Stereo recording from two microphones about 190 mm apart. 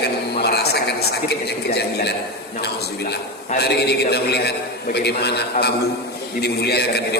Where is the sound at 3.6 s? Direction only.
60° left (ahead or behind).